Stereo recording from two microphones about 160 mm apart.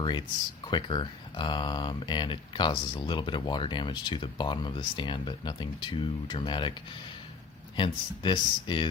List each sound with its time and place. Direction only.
0.0 s speech: 25° left (ahead or behind)
7.8 s speech: 30° left (ahead or behind)